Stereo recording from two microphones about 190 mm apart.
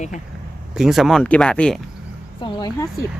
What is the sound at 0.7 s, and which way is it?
Speech, centre (ahead or behind).